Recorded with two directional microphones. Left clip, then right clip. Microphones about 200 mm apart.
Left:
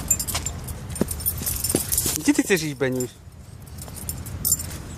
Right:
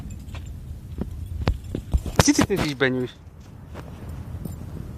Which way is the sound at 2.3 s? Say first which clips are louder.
Left 5 dB; 5° left (ahead or behind).